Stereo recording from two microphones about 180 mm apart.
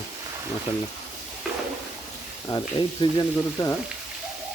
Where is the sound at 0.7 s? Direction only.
40° left (ahead or behind).